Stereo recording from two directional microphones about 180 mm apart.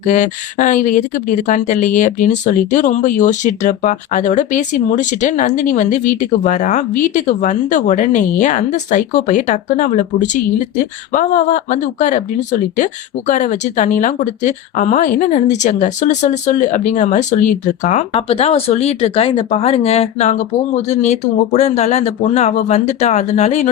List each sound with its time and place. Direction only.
0.1 s speech: 45° left (ahead or behind)